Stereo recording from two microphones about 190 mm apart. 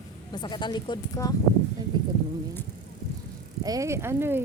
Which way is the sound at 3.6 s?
20° right (ahead or behind).